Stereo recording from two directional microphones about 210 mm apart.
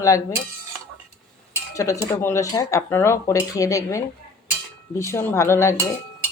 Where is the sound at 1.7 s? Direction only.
15° left (ahead or behind).